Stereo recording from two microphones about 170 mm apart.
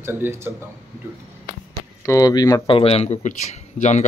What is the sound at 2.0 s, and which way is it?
Speech, 20° left (ahead or behind).